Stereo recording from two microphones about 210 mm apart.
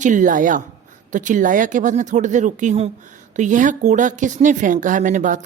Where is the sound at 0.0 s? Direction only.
40° right (ahead or behind).